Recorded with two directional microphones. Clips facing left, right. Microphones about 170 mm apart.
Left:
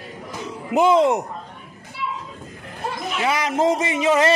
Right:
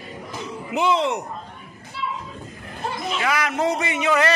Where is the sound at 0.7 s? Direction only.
45° left (ahead or behind).